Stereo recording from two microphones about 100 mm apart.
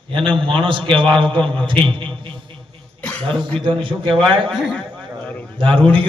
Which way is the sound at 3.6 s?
60° right (ahead or behind).